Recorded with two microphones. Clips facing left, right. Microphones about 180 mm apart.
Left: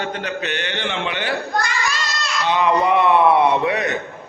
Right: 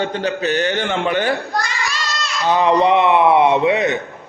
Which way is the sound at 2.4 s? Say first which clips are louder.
Right 3 dB; 35° right (ahead or behind).